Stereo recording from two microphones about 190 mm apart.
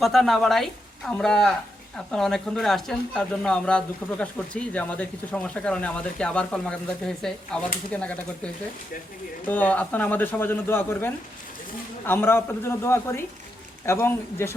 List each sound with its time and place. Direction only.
0.0 s speech: centre (ahead or behind)
9.5 s speech: 10° left (ahead or behind)